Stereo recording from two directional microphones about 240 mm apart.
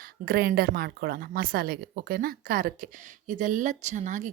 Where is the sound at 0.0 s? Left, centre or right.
Right.